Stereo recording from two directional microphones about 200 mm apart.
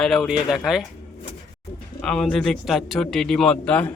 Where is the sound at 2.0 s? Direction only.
5° left (ahead or behind).